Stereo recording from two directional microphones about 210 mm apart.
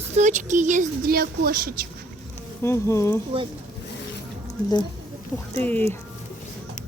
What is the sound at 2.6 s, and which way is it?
Speech, 15° left (ahead or behind).